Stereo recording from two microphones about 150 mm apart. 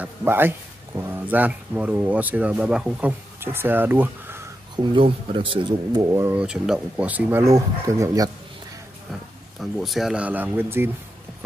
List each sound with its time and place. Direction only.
0.0 s speech: 15° right (ahead or behind)
4.7 s speech: 35° right (ahead or behind)
5.9 s speech: 25° right (ahead or behind)
6.3 s speech: 5° right (ahead or behind); by 8.3 s 20° right (ahead or behind)
9.6 s speech: centre (ahead or behind)